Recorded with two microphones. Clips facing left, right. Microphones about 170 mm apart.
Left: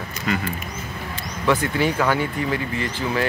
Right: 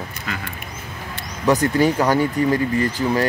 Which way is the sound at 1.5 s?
40° right (ahead or behind).